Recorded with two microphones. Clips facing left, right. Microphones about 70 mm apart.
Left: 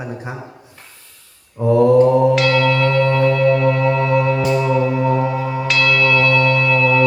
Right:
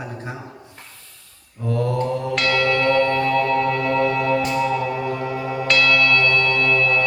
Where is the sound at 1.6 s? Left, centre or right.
Centre.